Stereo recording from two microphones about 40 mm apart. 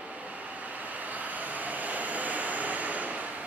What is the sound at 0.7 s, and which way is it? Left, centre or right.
Vehicle, right.